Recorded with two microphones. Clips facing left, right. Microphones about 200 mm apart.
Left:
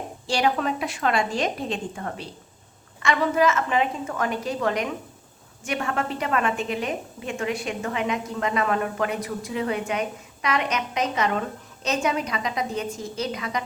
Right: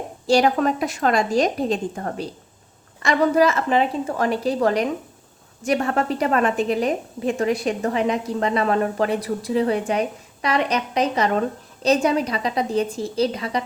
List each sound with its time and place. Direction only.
0.3 s a woman's voice: 45° right (ahead or behind)